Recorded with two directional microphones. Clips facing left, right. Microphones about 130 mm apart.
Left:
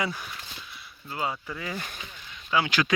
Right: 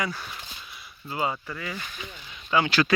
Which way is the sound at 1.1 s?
5° right (ahead or behind).